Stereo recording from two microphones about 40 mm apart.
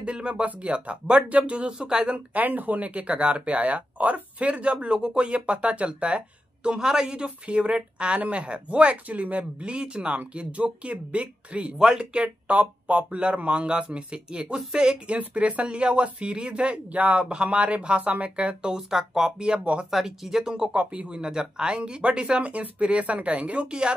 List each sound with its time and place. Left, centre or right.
0.0 s a sound: right
0.5 s speech: right
2.3 s speech: right
4.8 s speech: right
7.2 s speech: right
9.6 s speech: right
15.1 s speech: right
19.6 s speech: right
19.9 s speech: centre; by 23.7 s right